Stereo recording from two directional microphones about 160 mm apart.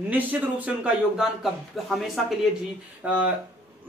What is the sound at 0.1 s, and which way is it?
A man's voice, 10° right (ahead or behind).